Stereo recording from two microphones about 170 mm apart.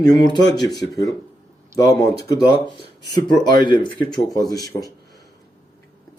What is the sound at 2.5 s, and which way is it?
Speech, 75° right (ahead or behind).